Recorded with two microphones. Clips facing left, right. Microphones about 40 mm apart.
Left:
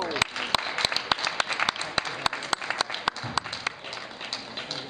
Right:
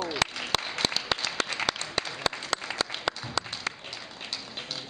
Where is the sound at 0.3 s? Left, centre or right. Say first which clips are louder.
Left 3 dB; centre.